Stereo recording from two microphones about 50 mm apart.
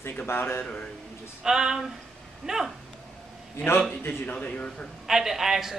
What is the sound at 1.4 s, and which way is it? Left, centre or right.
Speech, centre.